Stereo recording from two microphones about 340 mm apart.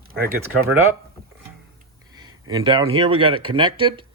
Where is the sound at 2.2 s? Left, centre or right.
Centre.